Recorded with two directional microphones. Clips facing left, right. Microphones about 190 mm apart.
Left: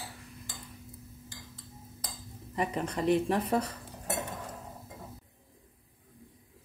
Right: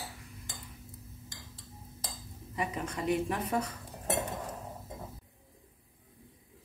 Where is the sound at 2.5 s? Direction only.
35° left (ahead or behind).